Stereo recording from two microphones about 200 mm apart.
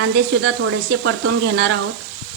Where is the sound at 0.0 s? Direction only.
55° right (ahead or behind).